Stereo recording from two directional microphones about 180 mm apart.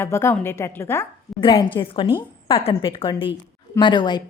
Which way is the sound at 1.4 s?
25° left (ahead or behind).